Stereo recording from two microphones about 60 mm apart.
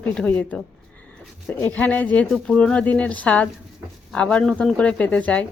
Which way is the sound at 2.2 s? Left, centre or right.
Centre.